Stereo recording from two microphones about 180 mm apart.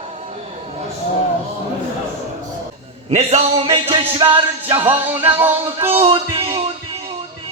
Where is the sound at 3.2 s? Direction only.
35° right (ahead or behind).